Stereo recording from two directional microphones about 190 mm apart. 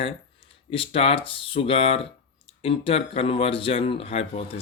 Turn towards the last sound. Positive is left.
turn(degrees=30)  # may be behind; listen again after turning